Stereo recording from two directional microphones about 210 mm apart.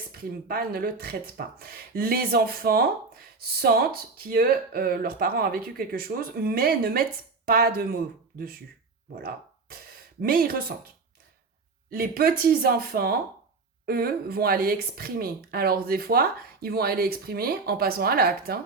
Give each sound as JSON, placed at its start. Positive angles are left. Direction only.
{"t": 0.1, "sound": "a woman's voice", "side_deg": -45}
{"t": 10.2, "sound": "a woman's voice", "side_deg": -45}
{"t": 11.9, "sound": "a woman's voice", "side_deg": -45}